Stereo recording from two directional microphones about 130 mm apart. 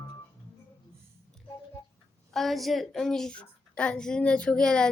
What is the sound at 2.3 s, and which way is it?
A woman's voice, centre (ahead or behind).